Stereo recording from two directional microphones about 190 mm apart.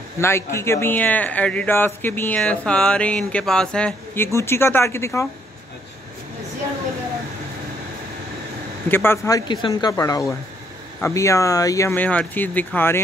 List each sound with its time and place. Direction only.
0.2 s speech: 15° left (ahead or behind)
8.8 s speech: 10° left (ahead or behind)